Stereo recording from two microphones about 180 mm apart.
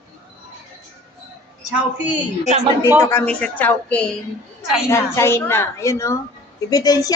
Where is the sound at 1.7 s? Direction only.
5° right (ahead or behind).